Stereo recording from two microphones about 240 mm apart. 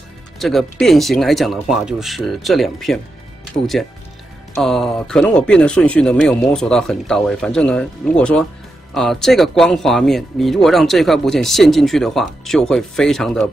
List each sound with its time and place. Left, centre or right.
0.4 s speech: centre